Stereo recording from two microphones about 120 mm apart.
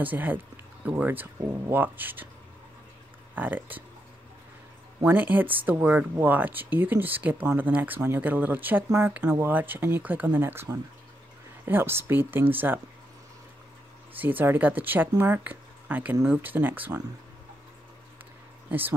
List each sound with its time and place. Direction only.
0.0 s speech: 15° right (ahead or behind)
3.3 s speech: 15° right (ahead or behind)
5.0 s speech: 15° right (ahead or behind)
14.1 s speech: 15° right (ahead or behind)
18.7 s speech: 15° right (ahead or behind)